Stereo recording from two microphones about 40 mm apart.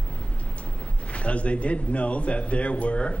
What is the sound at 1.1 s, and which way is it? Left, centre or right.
Speech, left.